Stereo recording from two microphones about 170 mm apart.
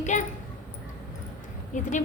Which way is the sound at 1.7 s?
50° left (ahead or behind).